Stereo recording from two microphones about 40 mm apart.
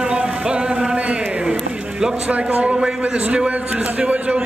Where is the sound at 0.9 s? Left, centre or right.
Right.